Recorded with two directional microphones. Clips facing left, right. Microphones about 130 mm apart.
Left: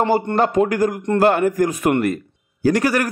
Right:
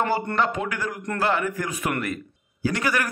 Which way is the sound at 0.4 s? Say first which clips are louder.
Left 9 dB; 40° left (ahead or behind).